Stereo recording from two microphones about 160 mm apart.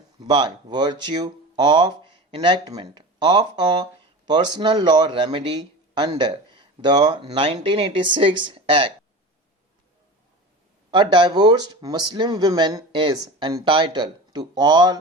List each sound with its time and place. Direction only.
0.2 s speech: 25° right (ahead or behind)
10.9 s speech: 30° right (ahead or behind)